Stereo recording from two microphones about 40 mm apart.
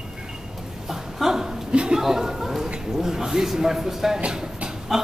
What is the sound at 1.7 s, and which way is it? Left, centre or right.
Speech, right.